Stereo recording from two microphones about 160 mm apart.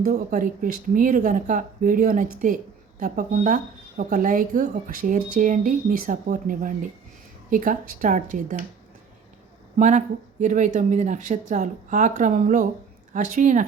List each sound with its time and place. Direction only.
0.0 s speech: 55° right (ahead or behind)
9.7 s speech: 50° right (ahead or behind)